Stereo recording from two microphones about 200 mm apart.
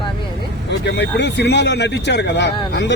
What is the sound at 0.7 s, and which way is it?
Speech, 60° left (ahead or behind).